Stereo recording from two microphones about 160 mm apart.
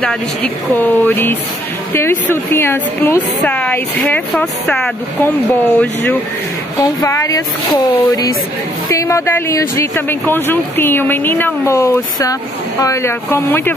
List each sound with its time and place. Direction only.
0.0 s a woman's voice: 5° left (ahead or behind)